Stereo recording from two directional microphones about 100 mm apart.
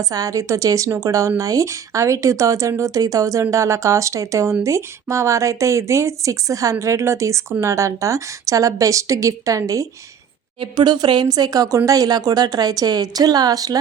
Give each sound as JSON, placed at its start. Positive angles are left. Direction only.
{"t": 0.0, "sound": "speech", "side_deg": -35}
{"t": 10.6, "sound": "speech", "side_deg": -50}